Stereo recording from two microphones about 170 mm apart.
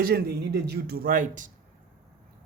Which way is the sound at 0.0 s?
65° right (ahead or behind).